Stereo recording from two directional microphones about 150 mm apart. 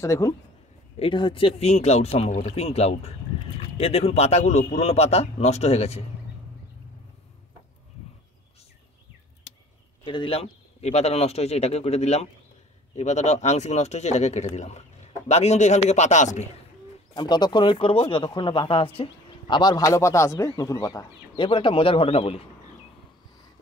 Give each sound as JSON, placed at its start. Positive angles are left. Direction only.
{"t": 0.0, "sound": "speech", "side_deg": 20}
{"t": 0.9, "sound": "speech", "side_deg": 35}
{"t": 10.0, "sound": "speech", "side_deg": 35}
{"t": 17.1, "sound": "speech", "side_deg": 30}
{"t": 21.5, "sound": "speech", "side_deg": 35}